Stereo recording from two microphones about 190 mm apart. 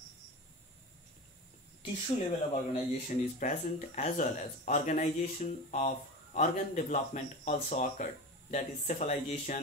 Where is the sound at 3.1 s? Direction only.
40° left (ahead or behind).